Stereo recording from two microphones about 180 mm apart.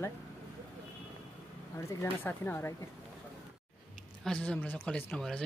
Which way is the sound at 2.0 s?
10° left (ahead or behind).